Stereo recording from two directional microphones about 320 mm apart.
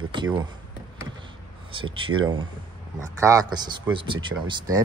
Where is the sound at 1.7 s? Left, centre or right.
Centre.